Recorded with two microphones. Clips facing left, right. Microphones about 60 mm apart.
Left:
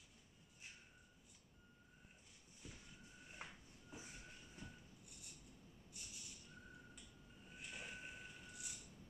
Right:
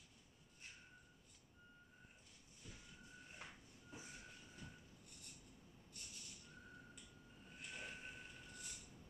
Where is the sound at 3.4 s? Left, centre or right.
Left.